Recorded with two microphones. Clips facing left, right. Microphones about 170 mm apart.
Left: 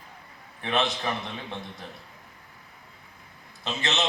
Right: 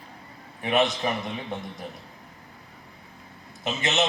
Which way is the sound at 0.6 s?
15° right (ahead or behind).